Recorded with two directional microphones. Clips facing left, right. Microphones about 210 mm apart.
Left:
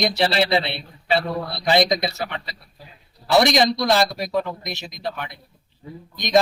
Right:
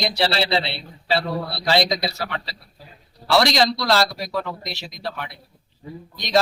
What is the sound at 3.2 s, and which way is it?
A man's voice, 20° left (ahead or behind).